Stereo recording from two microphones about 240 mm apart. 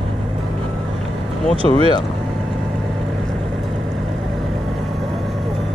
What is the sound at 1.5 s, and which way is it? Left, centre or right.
Speech, right.